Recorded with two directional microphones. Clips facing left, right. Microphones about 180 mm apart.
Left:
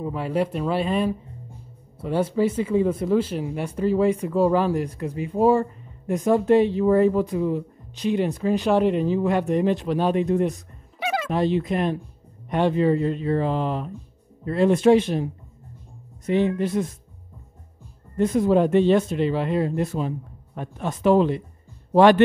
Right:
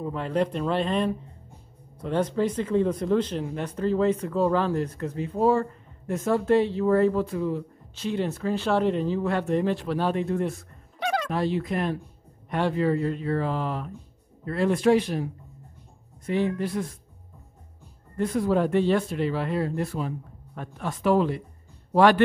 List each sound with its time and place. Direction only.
0.0 s speech: 5° left (ahead or behind)
11.0 s a sound: 5° left (ahead or behind)
11.2 s speech: 20° left (ahead or behind)
18.1 s speech: 20° left (ahead or behind)